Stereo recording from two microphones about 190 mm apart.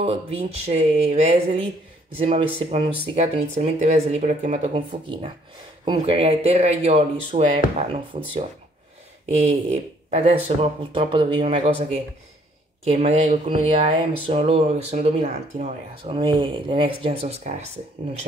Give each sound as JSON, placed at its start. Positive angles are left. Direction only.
{"t": 0.0, "sound": "speech", "side_deg": -30}
{"t": 9.4, "sound": "speech", "side_deg": -35}